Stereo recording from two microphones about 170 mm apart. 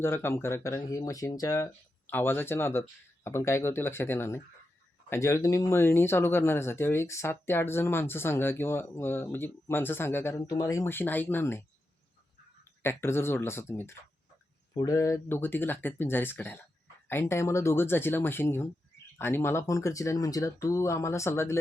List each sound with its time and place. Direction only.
0.0 s speech: 15° left (ahead or behind)
12.8 s speech: 15° left (ahead or behind)